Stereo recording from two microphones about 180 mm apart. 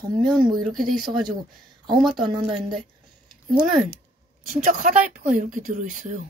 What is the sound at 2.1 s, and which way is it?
Speech, 25° right (ahead or behind).